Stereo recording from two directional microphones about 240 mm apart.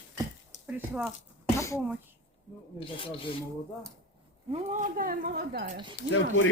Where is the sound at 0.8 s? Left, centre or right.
Centre.